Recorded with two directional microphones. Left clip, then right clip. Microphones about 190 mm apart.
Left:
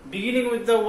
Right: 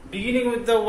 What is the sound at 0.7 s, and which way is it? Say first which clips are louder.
Speech: even; 25° right (ahead or behind).